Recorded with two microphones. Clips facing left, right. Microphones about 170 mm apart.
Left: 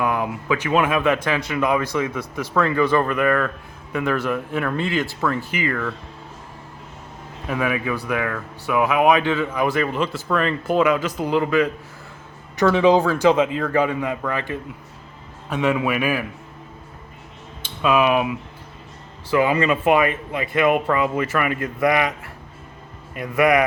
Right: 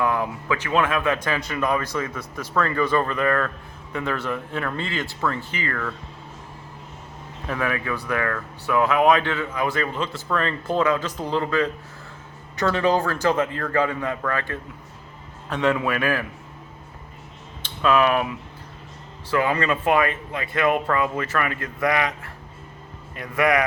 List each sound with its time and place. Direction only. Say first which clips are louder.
0.0 s speech: left 1 dB; 15° left (ahead or behind)
5.2 s speech: left 2 dB; centre (ahead or behind)
5.5 s speech: left 5 dB; 10° left (ahead or behind)
7.4 s a man's voice: left 3 dB; 15° left (ahead or behind)
17.8 s speech: left 1 dB; 15° left (ahead or behind)
23.1 s speech: left 4 dB; 20° left (ahead or behind)